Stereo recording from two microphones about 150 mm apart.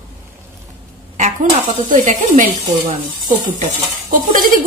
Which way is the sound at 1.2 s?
55° right (ahead or behind).